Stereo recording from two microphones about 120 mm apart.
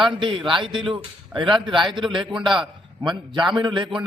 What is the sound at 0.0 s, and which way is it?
A man's voice, 45° right (ahead or behind).